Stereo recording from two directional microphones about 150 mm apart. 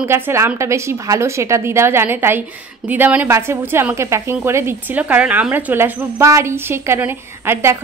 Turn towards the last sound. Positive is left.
turn(degrees=-15)  # may be behind; listen again after turning